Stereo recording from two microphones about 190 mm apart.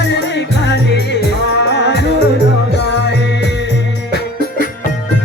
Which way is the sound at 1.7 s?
60° left (ahead or behind).